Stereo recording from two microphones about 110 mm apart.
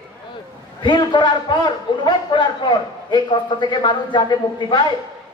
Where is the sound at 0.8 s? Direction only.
45° left (ahead or behind).